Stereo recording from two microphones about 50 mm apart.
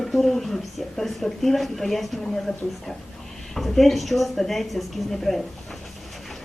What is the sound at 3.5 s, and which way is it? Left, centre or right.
A woman's voice, centre.